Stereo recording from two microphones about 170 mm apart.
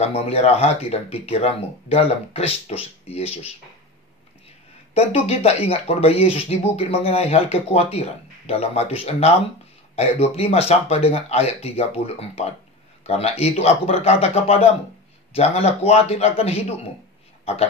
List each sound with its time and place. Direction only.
0.0 s speech: 35° left (ahead or behind)
4.9 s speech: 35° left (ahead or behind)